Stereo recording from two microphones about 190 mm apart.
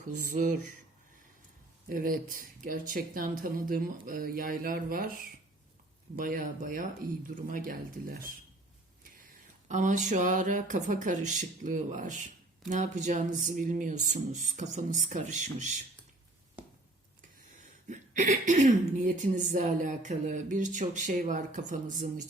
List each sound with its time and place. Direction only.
0.1 s speech: 45° right (ahead or behind)
1.9 s speech: 50° right (ahead or behind)
9.6 s speech: 40° right (ahead or behind)
17.8 s speech: 40° right (ahead or behind)